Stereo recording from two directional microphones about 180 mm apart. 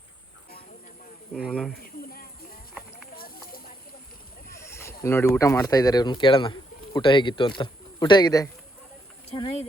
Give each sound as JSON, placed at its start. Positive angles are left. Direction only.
{"t": 1.3, "sound": "speech", "side_deg": 5}
{"t": 2.0, "sound": "a sound", "side_deg": 55}
{"t": 4.5, "sound": "boat", "side_deg": 15}
{"t": 5.3, "sound": "a man's voice", "side_deg": 15}
{"t": 9.3, "sound": "speech", "side_deg": 30}